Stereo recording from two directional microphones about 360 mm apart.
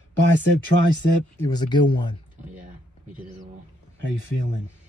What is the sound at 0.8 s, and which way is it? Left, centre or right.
Speech, right.